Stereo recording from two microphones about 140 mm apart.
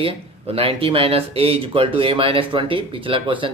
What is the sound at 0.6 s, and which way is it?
Speech, 40° right (ahead or behind).